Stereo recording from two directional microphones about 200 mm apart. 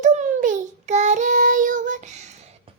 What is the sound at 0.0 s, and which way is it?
Child singing, 35° right (ahead or behind).